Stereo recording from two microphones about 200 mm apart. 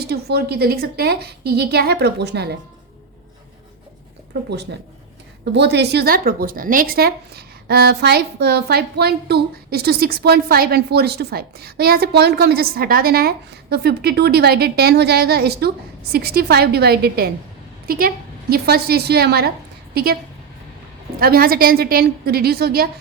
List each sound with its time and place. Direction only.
0.1 s a woman's voice: 50° right (ahead or behind)
5.5 s a woman's voice: 55° right (ahead or behind)
21.2 s a woman's voice: 50° right (ahead or behind)